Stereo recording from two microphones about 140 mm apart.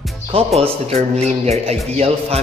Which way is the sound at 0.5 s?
45° right (ahead or behind).